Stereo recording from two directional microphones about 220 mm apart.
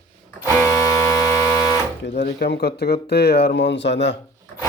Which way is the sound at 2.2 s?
50° left (ahead or behind).